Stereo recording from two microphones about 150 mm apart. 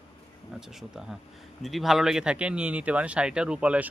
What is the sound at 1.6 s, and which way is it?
Speech, centre (ahead or behind).